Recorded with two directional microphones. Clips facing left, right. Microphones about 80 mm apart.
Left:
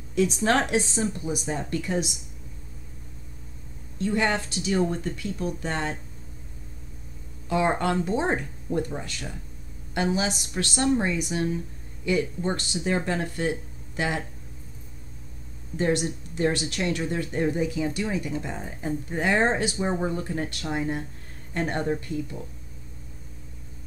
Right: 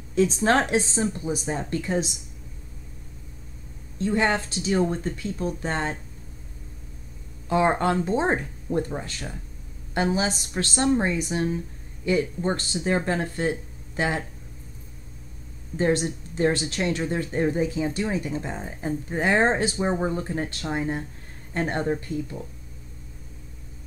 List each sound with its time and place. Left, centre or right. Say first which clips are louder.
0.1 s speech: right 2 dB; right
4.0 s speech: right 2 dB; right
7.4 s speech: right 2 dB; right
15.8 s speech: right 2 dB; right